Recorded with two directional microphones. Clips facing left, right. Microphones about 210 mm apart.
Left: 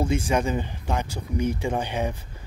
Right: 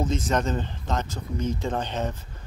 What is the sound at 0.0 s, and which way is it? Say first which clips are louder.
Speech: left 2 dB; 10° left (ahead or behind).